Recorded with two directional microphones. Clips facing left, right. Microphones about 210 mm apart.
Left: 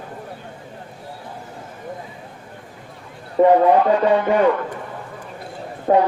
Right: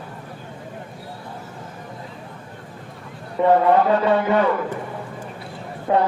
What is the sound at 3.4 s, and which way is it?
Speech, 40° left (ahead or behind).